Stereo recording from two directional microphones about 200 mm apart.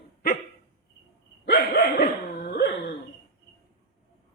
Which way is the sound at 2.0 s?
40° left (ahead or behind).